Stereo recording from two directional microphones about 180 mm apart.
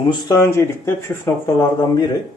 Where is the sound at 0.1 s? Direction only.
20° left (ahead or behind).